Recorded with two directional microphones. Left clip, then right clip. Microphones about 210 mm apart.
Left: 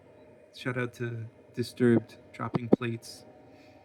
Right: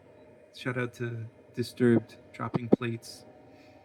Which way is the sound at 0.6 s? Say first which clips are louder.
Even; 50° left (ahead or behind).